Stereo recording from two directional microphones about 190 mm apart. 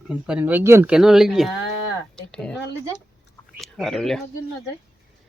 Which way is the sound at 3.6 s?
Centre (ahead or behind).